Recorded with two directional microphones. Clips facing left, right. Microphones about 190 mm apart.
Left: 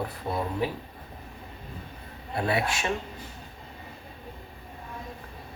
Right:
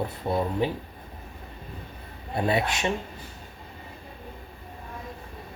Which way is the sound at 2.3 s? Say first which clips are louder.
Right 2 dB; 20° right (ahead or behind).